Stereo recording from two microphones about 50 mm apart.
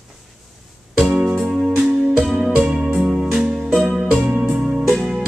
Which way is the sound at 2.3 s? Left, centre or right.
Centre.